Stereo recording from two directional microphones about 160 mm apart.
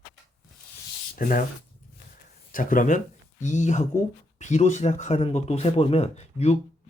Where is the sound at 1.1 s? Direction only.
60° left (ahead or behind).